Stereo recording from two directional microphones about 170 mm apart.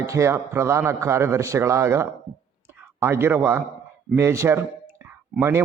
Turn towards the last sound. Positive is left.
turn(degrees=-15)  # may be behind; listen again after turning